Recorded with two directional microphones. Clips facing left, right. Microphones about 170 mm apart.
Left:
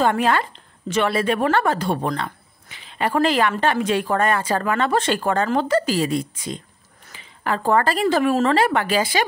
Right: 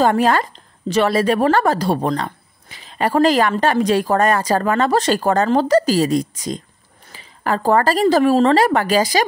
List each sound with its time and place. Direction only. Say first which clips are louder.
0.0 s a woman's voice: right 4 dB; 40° right (ahead or behind)